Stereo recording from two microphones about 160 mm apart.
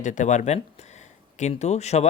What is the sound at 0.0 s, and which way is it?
Speech, 50° left (ahead or behind).